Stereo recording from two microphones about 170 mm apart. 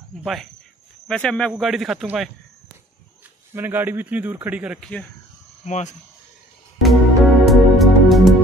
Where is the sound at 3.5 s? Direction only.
10° right (ahead or behind).